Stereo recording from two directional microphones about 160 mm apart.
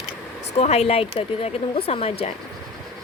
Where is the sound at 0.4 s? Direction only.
40° left (ahead or behind).